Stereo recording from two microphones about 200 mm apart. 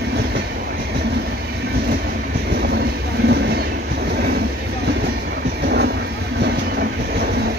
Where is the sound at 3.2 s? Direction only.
55° right (ahead or behind).